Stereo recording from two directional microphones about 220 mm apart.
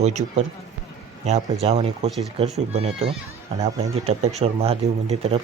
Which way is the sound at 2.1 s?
Centre (ahead or behind).